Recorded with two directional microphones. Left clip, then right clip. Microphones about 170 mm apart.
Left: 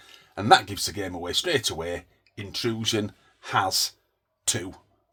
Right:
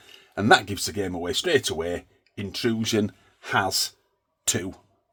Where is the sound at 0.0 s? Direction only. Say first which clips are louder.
Right 4 dB; 55° right (ahead or behind).